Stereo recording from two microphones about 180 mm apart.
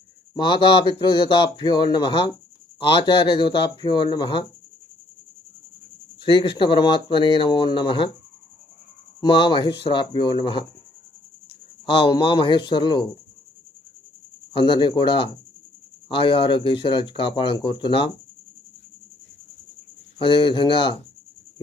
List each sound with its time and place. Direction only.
0.3 s speech: 25° left (ahead or behind)
6.1 s speech: 30° left (ahead or behind)
9.2 s speech: 25° left (ahead or behind)
11.9 s speech: 30° left (ahead or behind)
14.5 s speech: 30° left (ahead or behind)
20.1 s speech: 30° left (ahead or behind)